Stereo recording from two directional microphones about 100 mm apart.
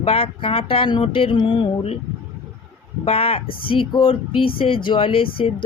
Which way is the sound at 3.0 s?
75° left (ahead or behind).